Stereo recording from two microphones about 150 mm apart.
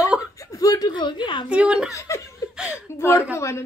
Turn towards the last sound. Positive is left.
turn(degrees=20)  # may be behind; listen again after turning